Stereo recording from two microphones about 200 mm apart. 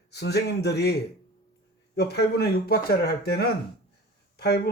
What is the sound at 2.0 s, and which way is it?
Speech, 55° left (ahead or behind).